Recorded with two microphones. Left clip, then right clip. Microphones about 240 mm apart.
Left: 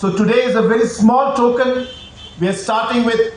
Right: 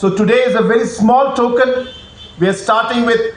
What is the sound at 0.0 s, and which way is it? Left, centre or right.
Speech, right.